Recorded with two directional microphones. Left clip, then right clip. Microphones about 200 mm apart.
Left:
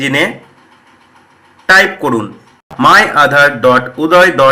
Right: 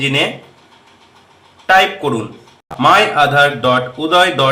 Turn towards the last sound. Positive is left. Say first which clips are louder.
# left 5 dB
turn(degrees=20)  # may be behind; listen again after turning